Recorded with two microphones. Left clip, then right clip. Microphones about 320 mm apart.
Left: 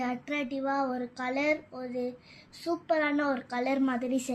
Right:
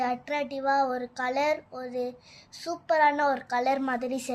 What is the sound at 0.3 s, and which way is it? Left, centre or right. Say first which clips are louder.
A woman's voice: right 5 dB; right.